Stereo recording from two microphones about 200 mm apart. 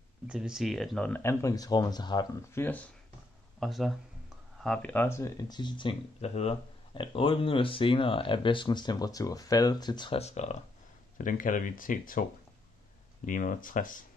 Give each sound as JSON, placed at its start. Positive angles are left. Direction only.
{"t": 0.3, "sound": "speech", "side_deg": -5}
{"t": 2.6, "sound": "speech", "side_deg": 10}